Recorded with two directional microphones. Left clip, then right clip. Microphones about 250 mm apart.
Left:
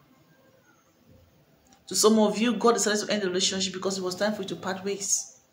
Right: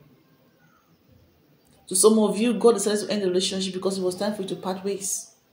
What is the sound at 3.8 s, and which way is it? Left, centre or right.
Speech, left.